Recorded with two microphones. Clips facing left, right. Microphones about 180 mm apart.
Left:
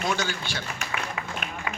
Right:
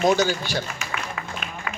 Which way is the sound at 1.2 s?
20° left (ahead or behind).